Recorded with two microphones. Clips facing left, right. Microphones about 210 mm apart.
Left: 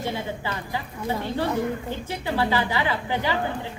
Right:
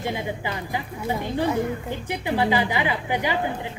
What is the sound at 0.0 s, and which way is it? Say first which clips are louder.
A woman's voice: right 1 dB; 15° right (ahead or behind).